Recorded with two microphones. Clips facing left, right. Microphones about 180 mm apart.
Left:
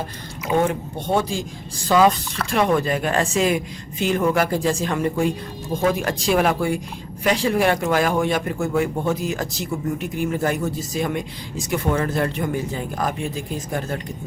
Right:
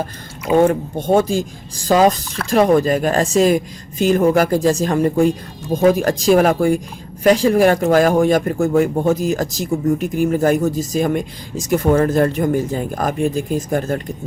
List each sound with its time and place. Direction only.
0.6 s speech: 45° right (ahead or behind)